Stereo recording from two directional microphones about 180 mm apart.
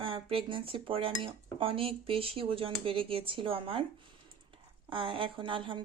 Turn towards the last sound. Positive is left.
turn(degrees=-30)  # may be behind; listen again after turning